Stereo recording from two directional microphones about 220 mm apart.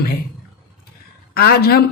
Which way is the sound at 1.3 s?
45° left (ahead or behind).